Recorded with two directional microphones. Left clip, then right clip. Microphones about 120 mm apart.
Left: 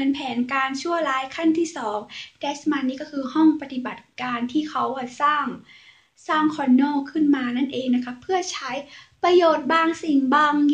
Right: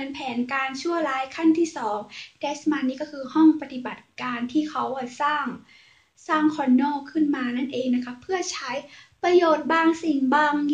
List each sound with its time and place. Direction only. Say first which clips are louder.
0.1 s speech: left 3 dB; 20° left (ahead or behind)